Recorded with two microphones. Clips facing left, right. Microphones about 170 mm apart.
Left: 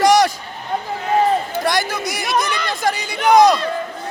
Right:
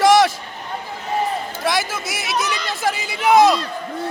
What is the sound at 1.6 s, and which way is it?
Speech, centre (ahead or behind).